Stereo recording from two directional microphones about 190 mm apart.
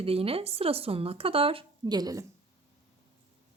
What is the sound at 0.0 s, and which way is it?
Speech, 30° right (ahead or behind).